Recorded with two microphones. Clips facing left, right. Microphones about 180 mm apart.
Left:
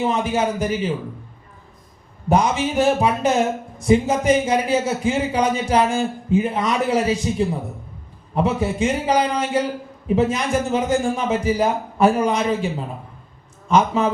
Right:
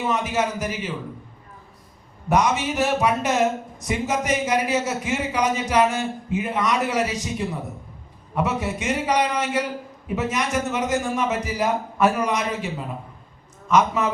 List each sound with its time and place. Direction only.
0.0 s speech: 30° left (ahead or behind)
2.3 s speech: 30° left (ahead or behind)